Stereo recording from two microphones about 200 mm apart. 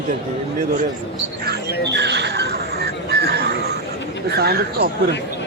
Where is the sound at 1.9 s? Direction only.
60° right (ahead or behind).